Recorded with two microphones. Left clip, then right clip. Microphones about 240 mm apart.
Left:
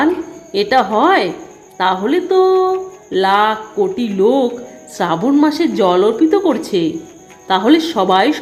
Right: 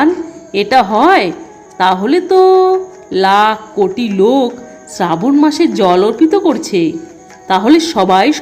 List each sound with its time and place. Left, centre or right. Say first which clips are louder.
0.5 s music: right 3 dB; centre